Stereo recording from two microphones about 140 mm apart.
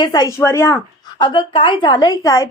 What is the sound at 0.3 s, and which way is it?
Speech, 15° left (ahead or behind).